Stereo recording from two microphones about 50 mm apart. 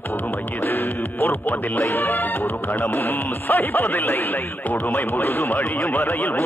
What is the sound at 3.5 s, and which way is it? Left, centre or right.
Speech, left.